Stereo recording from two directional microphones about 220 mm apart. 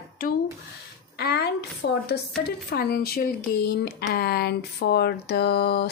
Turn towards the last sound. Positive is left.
turn(degrees=45)  # may be behind; listen again after turning